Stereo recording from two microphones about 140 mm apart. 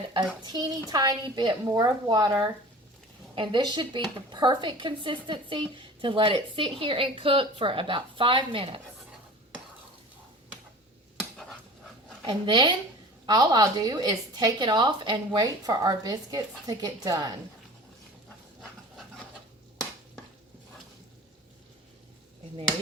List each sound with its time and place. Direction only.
0.4 s a woman's voice: 30° right (ahead or behind)
11.2 s a sound: 5° left (ahead or behind)
12.2 s a woman's voice: 35° right (ahead or behind)